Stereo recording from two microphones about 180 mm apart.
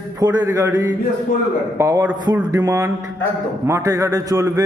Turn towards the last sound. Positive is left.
turn(degrees=-20)  # may be behind; listen again after turning